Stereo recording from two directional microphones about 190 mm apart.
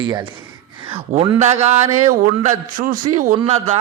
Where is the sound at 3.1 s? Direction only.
45° right (ahead or behind).